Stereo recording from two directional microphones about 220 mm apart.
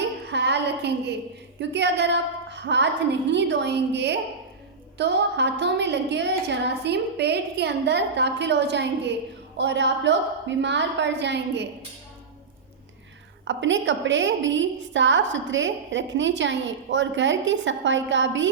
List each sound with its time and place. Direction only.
0.3 s a sound: 50° right (ahead or behind)
1.7 s a woman's voice: 50° right (ahead or behind)
13.4 s a woman's voice: 55° right (ahead or behind)